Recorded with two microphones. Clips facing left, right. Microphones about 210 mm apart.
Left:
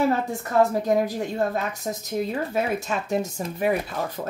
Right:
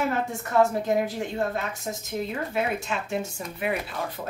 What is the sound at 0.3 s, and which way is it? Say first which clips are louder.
A woman's voice: left 1 dB; 35° left (ahead or behind).